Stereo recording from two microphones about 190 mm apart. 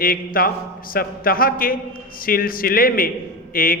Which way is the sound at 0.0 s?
50° left (ahead or behind).